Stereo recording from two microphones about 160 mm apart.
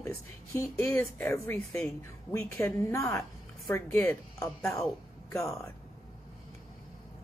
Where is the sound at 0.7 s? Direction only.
15° left (ahead or behind).